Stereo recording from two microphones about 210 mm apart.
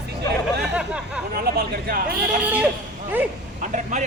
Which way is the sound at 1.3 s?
45° right (ahead or behind).